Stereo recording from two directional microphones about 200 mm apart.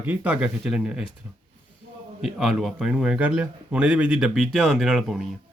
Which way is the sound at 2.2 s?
Centre (ahead or behind).